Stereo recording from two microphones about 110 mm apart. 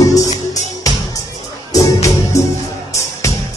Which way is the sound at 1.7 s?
30° left (ahead or behind).